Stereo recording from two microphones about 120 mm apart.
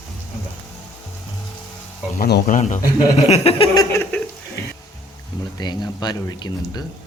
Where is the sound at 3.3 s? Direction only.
55° left (ahead or behind).